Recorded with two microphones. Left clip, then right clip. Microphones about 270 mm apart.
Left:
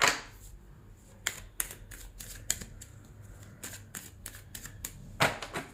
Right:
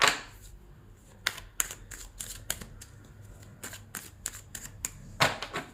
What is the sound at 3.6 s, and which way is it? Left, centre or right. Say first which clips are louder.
Typewriter: right 3 dB; right.